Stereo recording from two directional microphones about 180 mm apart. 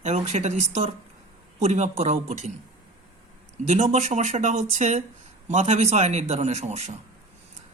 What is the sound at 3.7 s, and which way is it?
Speech, 40° right (ahead or behind).